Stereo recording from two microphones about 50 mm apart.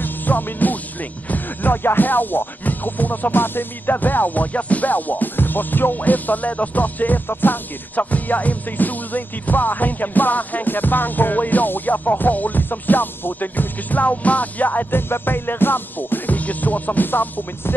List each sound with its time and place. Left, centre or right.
0.0 s music: left